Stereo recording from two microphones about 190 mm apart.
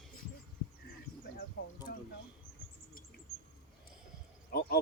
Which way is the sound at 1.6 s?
60° left (ahead or behind).